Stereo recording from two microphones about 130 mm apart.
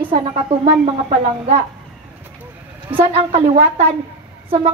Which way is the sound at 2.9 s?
45° right (ahead or behind).